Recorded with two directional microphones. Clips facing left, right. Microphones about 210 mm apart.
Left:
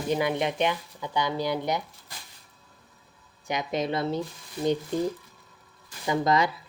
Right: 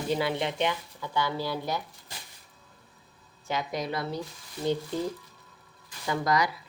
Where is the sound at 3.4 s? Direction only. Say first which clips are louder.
Left 3 dB; 20° left (ahead or behind).